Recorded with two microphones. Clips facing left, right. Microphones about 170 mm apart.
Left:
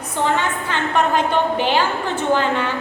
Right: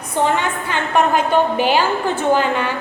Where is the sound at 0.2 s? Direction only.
15° right (ahead or behind).